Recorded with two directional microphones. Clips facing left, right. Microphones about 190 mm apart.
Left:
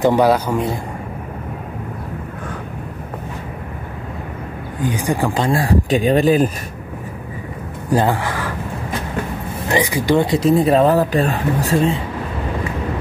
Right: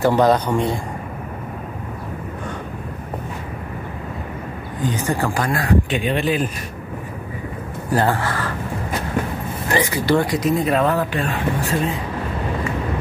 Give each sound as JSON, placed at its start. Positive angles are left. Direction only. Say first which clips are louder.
{"t": 0.0, "sound": "speech", "louder": "left 2 dB", "side_deg": 10}
{"t": 4.8, "sound": "speech", "louder": "left 2 dB", "side_deg": 15}
{"t": 7.9, "sound": "speech", "louder": "left 2 dB", "side_deg": 15}
{"t": 9.7, "sound": "speech", "louder": "left 2 dB", "side_deg": 15}